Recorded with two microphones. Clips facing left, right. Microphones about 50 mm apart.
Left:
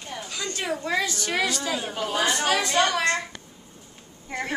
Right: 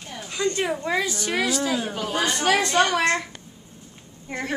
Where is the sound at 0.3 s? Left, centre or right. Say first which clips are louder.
Right 6 dB; centre.